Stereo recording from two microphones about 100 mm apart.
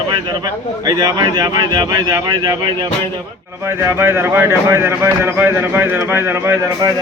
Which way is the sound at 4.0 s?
25° right (ahead or behind).